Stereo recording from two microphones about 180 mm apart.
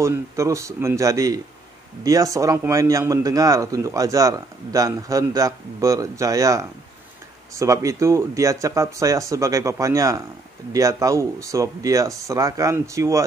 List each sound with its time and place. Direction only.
0.0 s a man's voice: 15° right (ahead or behind)